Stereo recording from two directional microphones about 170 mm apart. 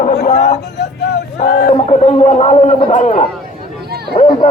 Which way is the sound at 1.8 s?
40° left (ahead or behind).